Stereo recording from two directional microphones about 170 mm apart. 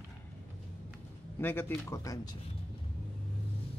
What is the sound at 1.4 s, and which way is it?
Speech, 10° left (ahead or behind).